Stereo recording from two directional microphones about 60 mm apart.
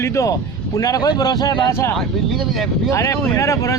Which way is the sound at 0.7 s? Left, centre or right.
Left.